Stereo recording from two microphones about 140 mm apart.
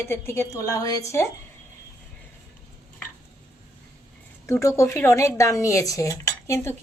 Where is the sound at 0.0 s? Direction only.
20° left (ahead or behind).